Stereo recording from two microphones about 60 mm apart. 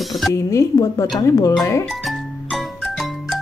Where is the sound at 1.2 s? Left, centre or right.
Left.